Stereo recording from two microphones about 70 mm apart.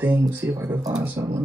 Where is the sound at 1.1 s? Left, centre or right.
Right.